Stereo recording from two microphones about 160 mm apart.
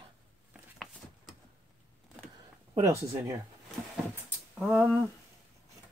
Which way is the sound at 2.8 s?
20° right (ahead or behind).